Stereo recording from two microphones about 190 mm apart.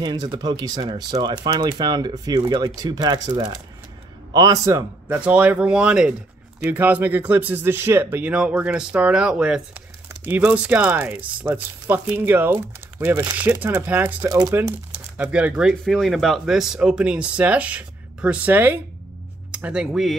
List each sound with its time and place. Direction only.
0.0 s speech: 20° right (ahead or behind); by 20.2 s 5° right (ahead or behind)